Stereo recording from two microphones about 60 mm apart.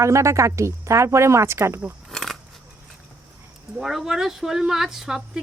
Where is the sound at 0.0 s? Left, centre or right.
Right.